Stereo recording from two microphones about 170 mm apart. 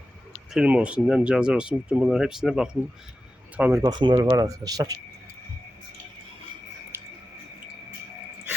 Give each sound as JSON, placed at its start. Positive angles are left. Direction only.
{"t": 0.5, "sound": "speech", "side_deg": -5}
{"t": 3.6, "sound": "speech", "side_deg": -15}